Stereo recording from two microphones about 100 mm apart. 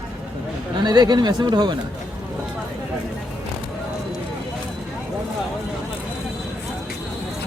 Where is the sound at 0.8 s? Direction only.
45° right (ahead or behind).